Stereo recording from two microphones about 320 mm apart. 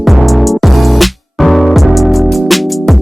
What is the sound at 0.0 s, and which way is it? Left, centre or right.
Music, centre.